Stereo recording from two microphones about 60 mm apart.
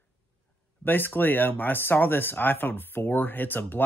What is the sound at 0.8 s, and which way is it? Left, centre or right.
Speech, left.